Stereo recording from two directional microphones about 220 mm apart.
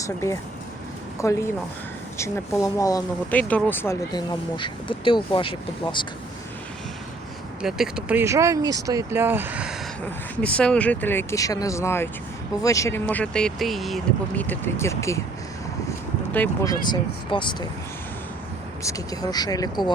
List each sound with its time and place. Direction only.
1.2 s speech: 15° left (ahead or behind)
7.6 s speech: 5° right (ahead or behind)
10.4 s speech: 5° left (ahead or behind)
16.3 s speech: 10° left (ahead or behind)
16.8 s speech: 20° left (ahead or behind)
18.8 s speech: 15° left (ahead or behind)